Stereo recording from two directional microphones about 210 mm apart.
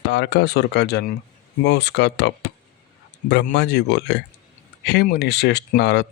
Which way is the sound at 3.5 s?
55° left (ahead or behind).